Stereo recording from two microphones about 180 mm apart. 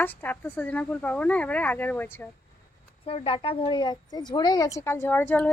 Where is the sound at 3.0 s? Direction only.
30° left (ahead or behind); by 5.5 s 10° left (ahead or behind).